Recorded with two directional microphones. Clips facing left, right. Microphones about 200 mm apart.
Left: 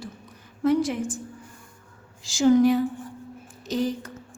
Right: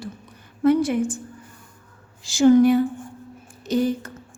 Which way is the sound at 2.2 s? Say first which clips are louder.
Right 4 dB; 60° right (ahead or behind).